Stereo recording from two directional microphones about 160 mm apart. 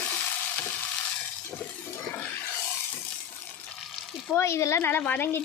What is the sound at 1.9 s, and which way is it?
Toilet flush, 15° left (ahead or behind).